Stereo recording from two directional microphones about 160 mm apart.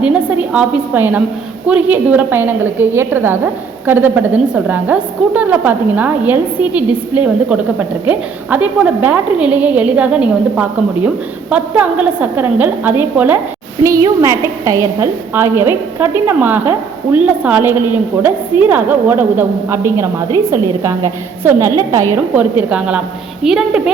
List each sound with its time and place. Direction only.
0.0 s a woman's voice: 10° right (ahead or behind)